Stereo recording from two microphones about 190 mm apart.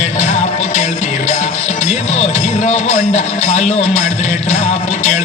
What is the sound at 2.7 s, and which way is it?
A man's voice, 35° left (ahead or behind).